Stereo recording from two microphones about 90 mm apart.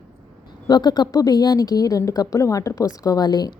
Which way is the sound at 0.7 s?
50° left (ahead or behind).